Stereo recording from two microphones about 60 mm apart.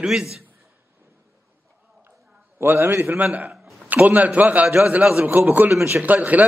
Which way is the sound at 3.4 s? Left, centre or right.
Centre.